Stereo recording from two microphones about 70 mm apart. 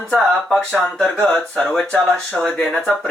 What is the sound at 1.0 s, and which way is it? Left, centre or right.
Speech, centre.